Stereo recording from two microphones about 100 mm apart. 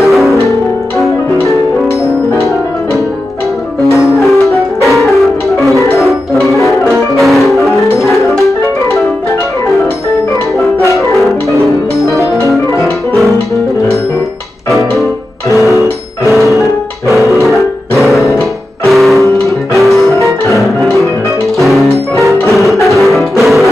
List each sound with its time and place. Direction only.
0.0 s music: centre (ahead or behind)
4.2 s music: centre (ahead or behind)
7.2 s music: centre (ahead or behind)
11.1 s music: centre (ahead or behind)
16.3 s music: centre (ahead or behind)
17.2 s music: 30° right (ahead or behind)
17.9 s music: centre (ahead or behind)
21.5 s music: centre (ahead or behind)